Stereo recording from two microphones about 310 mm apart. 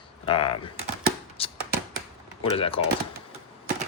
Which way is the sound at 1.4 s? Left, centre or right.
Centre.